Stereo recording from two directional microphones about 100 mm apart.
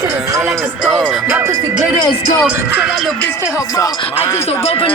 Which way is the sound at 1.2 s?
25° right (ahead or behind).